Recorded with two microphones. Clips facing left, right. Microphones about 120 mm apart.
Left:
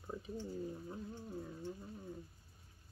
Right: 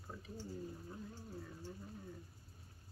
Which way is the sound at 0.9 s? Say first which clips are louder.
Left 4 dB; 20° left (ahead or behind).